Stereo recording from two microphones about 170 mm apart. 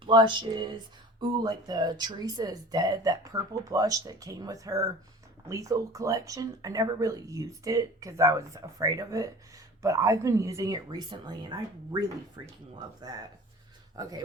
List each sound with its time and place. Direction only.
0.0 s speech: 30° right (ahead or behind)
13.9 s speech: 20° right (ahead or behind)